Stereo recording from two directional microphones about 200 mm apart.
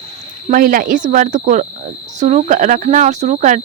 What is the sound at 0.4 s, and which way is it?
Speech, 45° right (ahead or behind).